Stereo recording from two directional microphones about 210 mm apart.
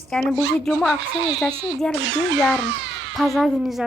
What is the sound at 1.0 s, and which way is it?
Speech, 65° right (ahead or behind).